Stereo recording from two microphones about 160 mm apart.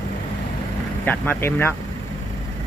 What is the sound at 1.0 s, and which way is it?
Speech, 10° left (ahead or behind).